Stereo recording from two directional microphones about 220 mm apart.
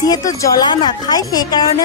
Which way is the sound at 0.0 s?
15° left (ahead or behind).